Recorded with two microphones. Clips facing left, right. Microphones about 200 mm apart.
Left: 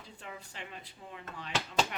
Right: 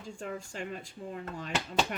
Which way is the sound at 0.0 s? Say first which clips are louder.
Right 8 dB; 45° right (ahead or behind).